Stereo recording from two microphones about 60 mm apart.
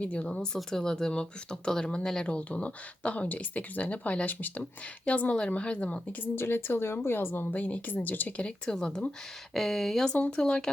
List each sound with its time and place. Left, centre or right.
0.0 s speech: left
6.3 s a woman's voice: left
7.4 s a woman's voice: left
8.4 s speech: centre
10.1 s speech: centre